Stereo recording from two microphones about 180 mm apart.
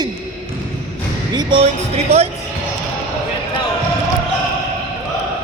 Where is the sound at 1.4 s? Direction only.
25° right (ahead or behind).